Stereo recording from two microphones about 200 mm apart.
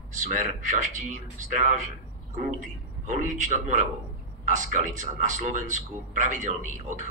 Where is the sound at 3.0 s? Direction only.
35° right (ahead or behind).